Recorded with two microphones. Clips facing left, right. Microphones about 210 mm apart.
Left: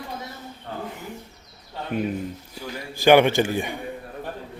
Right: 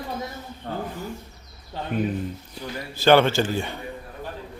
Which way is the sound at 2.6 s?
15° left (ahead or behind).